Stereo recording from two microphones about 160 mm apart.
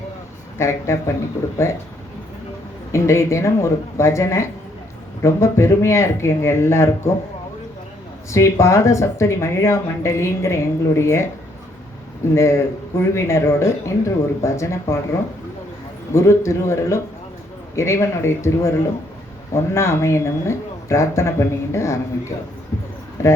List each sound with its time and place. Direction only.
0.6 s speech: 15° left (ahead or behind)
2.9 s speech: 15° left (ahead or behind)
8.3 s speech: 20° left (ahead or behind)
12.3 s speech: 15° left (ahead or behind)
16.1 s speech: 15° left (ahead or behind)
22.7 s a sound: 15° left (ahead or behind)